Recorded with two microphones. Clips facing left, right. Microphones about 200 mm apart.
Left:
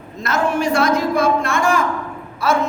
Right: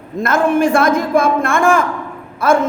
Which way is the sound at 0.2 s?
50° right (ahead or behind).